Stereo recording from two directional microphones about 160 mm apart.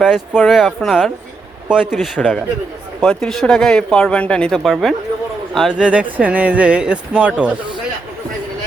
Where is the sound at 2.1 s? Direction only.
10° left (ahead or behind); by 7.5 s 10° right (ahead or behind).